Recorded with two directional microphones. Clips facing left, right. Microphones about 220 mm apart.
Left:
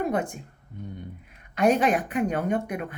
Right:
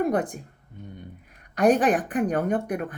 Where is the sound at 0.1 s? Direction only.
35° right (ahead or behind).